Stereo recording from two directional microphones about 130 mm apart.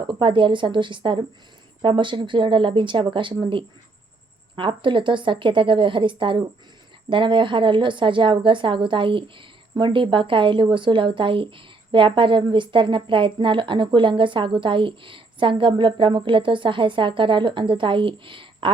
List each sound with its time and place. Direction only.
0.1 s a woman's voice: 40° right (ahead or behind)